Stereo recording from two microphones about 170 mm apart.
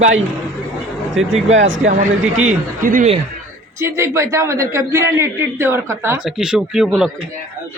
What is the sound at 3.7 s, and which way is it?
A man's voice, 15° right (ahead or behind).